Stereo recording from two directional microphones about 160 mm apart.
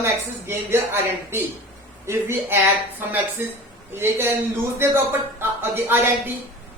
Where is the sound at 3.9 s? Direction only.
15° right (ahead or behind).